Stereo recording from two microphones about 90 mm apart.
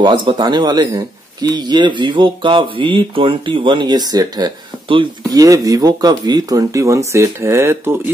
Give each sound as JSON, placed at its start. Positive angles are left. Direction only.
{"t": 0.0, "sound": "speech", "side_deg": -60}